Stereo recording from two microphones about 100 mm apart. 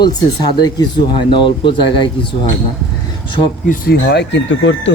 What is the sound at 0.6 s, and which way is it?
Speech, 45° left (ahead or behind).